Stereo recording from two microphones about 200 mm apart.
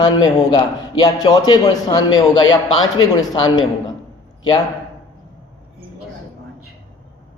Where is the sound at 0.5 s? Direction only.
20° left (ahead or behind).